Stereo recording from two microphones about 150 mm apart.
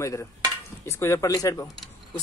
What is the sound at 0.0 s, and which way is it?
Speech, 20° left (ahead or behind).